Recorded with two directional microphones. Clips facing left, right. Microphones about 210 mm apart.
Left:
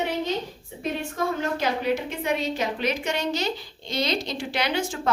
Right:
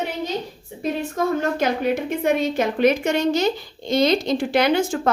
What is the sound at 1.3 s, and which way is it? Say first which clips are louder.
A woman's voice: right 5 dB; 50° right (ahead or behind).